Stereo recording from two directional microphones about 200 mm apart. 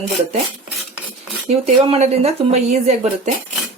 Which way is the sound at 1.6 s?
35° right (ahead or behind).